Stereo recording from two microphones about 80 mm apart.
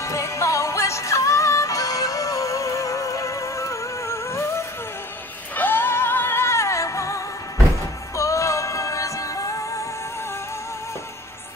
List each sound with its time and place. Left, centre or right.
0.0 s music: left
8.2 s synthetic singing: left